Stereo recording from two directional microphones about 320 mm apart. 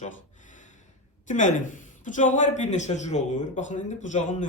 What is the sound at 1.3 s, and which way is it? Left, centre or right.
Speech, left.